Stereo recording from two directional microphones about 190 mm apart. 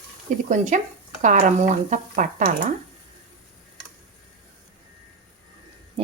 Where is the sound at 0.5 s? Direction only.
40° right (ahead or behind).